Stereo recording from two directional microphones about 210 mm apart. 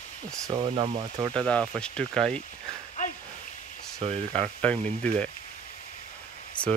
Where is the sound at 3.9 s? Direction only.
30° right (ahead or behind).